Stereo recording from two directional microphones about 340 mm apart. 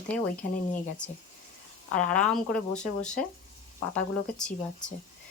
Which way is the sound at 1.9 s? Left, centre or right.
Centre.